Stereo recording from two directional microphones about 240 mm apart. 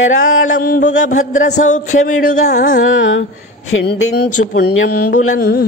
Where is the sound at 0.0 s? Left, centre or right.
Left.